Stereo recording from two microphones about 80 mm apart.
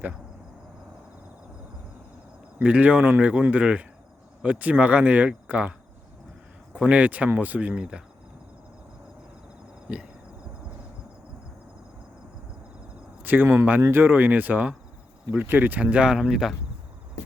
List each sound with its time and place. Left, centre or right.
2.6 s speech: centre
6.7 s speech: centre
9.9 s speech: centre
13.2 s speech: right; by 16.6 s centre